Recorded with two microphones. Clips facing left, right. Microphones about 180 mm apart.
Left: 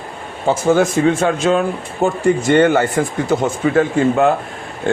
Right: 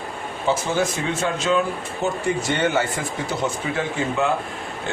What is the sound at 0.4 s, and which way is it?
A man's voice, 50° left (ahead or behind).